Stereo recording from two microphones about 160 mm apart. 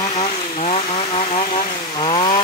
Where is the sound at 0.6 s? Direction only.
40° left (ahead or behind).